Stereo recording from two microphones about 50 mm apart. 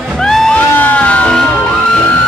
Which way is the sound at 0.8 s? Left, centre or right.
Left.